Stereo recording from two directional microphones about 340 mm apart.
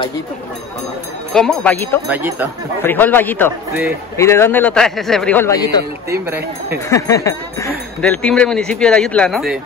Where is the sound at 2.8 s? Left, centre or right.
Centre.